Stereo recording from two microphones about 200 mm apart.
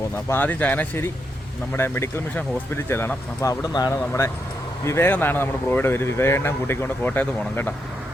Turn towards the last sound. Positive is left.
turn(degrees=10)  # may be behind; listen again after turning